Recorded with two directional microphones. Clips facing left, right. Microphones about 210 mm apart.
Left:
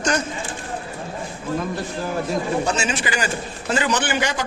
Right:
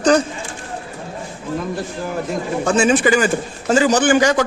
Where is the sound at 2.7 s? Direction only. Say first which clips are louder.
Right 9 dB; 50° right (ahead or behind).